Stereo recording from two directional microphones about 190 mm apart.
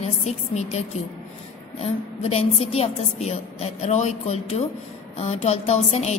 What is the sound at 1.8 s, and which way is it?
A woman's voice, 30° left (ahead or behind).